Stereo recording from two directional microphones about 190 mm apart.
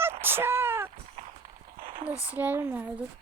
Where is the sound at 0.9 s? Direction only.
35° right (ahead or behind).